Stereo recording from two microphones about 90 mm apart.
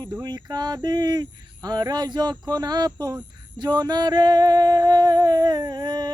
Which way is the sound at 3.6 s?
50° right (ahead or behind).